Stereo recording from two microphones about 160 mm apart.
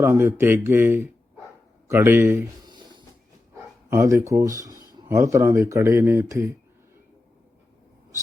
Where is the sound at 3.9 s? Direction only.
15° right (ahead or behind).